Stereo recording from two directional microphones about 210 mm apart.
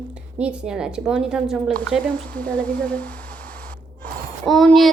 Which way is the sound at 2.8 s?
5° left (ahead or behind).